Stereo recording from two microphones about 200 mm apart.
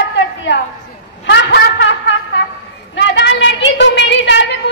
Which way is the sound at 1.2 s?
60° left (ahead or behind).